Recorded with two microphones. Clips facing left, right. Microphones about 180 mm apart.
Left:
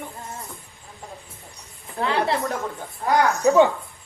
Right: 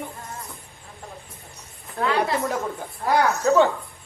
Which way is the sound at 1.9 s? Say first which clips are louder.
Even; 30° left (ahead or behind).